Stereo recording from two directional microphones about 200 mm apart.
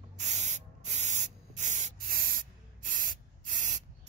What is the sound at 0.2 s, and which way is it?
Spray, 35° right (ahead or behind).